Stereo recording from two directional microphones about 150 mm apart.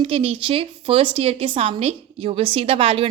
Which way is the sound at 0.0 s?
35° right (ahead or behind).